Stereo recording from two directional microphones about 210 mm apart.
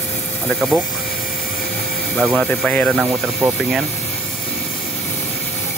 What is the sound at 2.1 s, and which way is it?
Speech, centre (ahead or behind).